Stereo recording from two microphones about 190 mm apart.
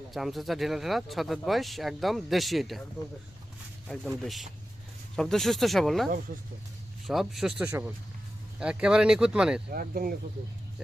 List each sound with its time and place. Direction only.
0.1 s speech: centre (ahead or behind)
3.8 s speech: centre (ahead or behind)
7.1 s speech: centre (ahead or behind)
7.7 s speech: 15° right (ahead or behind)
9.6 s speech: 50° right (ahead or behind)
10.8 s speech: 5° right (ahead or behind)